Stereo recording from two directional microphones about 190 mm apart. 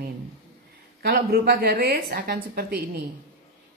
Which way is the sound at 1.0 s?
55° right (ahead or behind).